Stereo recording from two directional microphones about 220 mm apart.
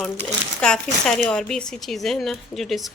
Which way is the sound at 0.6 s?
5° left (ahead or behind).